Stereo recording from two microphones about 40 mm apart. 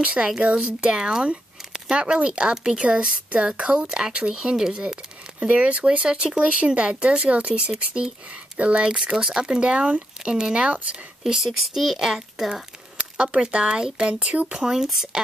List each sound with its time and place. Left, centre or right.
0.0 s speech: right
0.6 s speech: centre
5.4 s speech: right
6.0 s speech: right
11.2 s speech: centre
13.2 s speech: right
14.5 s speech: centre